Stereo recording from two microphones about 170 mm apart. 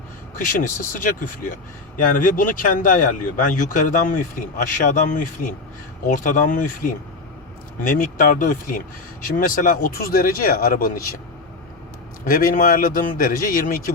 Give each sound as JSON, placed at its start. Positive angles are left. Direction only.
{"t": 0.3, "sound": "speech", "side_deg": 55}
{"t": 12.2, "sound": "speech", "side_deg": 55}